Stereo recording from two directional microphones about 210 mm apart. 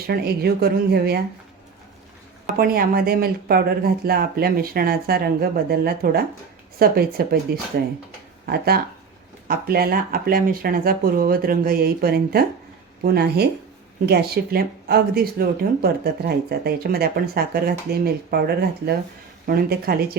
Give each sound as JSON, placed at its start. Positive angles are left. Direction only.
{"t": 0.1, "sound": "speech", "side_deg": -50}
{"t": 2.6, "sound": "speech", "side_deg": -45}